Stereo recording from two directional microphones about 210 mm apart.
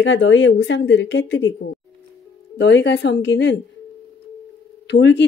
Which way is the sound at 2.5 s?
55° left (ahead or behind).